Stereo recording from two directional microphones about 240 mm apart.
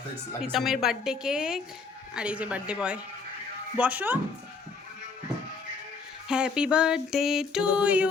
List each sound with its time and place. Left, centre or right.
0.4 s music: centre
3.8 s speech: centre
6.2 s music: centre